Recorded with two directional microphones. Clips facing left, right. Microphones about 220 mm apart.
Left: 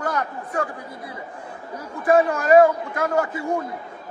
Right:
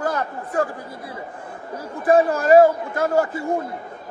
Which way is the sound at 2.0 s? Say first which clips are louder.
Right 2 dB; 30° right (ahead or behind).